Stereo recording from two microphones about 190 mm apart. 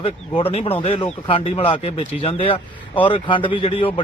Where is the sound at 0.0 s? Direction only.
30° left (ahead or behind).